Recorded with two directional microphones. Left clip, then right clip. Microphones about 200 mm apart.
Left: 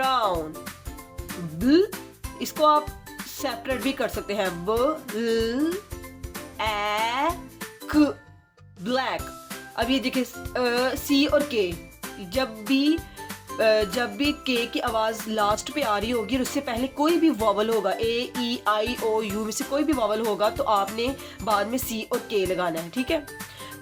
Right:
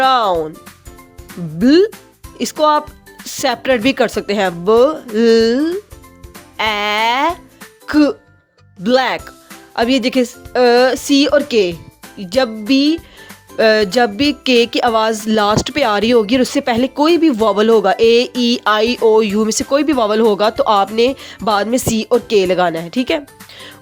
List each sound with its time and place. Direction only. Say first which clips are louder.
0.0 s music: right 11 dB; 45° right (ahead or behind)
1.6 s speech: right 9 dB; 40° right (ahead or behind)